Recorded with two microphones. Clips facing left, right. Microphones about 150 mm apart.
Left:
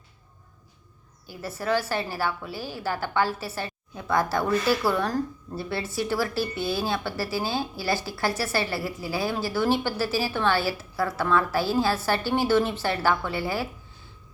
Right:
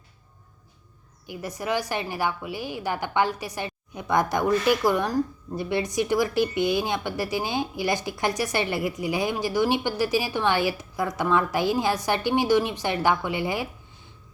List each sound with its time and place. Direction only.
1.3 s a woman's voice: 15° right (ahead or behind)